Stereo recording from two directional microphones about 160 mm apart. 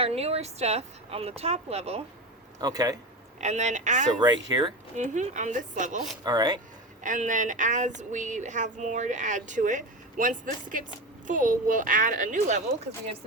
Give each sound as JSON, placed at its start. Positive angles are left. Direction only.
{"t": 0.0, "sound": "speech", "side_deg": -40}
{"t": 2.6, "sound": "speech", "side_deg": -25}
{"t": 3.4, "sound": "speech", "side_deg": -45}
{"t": 4.2, "sound": "speech", "side_deg": -25}
{"t": 4.9, "sound": "speech", "side_deg": -50}
{"t": 6.2, "sound": "speech", "side_deg": -25}
{"t": 7.0, "sound": "speech", "side_deg": -55}